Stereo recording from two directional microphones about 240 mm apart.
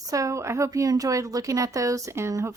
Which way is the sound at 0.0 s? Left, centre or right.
Centre.